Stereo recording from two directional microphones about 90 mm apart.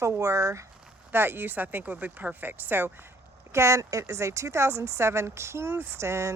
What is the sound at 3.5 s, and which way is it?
Speech, 35° right (ahead or behind).